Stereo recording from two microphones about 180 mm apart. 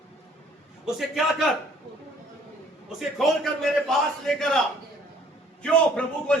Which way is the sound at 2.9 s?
Centre (ahead or behind).